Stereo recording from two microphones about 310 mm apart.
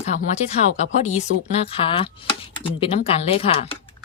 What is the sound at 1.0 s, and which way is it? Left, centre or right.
Speech, left.